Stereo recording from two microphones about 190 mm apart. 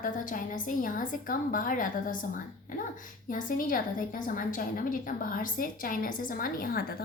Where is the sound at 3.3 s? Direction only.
45° left (ahead or behind).